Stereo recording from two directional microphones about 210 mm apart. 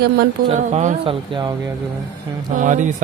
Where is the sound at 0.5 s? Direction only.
35° right (ahead or behind).